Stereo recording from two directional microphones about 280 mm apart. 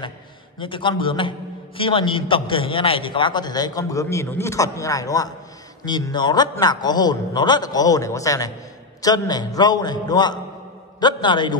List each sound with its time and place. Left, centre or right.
0.6 s a man's voice: centre